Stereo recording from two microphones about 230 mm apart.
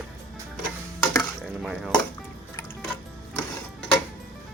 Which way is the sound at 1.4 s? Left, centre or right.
Centre.